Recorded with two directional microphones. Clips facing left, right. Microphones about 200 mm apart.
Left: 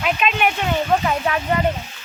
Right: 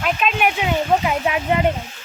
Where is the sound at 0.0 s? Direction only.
Centre (ahead or behind); by 1.6 s 15° right (ahead or behind).